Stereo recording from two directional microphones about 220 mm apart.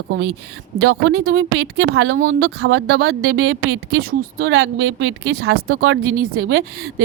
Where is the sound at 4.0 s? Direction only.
40° right (ahead or behind).